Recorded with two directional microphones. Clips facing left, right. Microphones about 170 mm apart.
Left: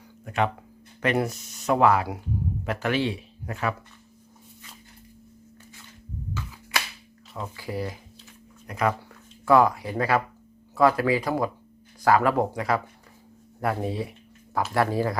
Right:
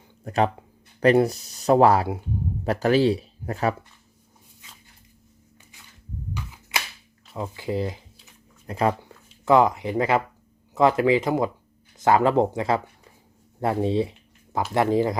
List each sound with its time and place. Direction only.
0.3 s speech: 35° right (ahead or behind)
6.3 s a sound: 20° right (ahead or behind)
7.3 s speech: 20° right (ahead or behind)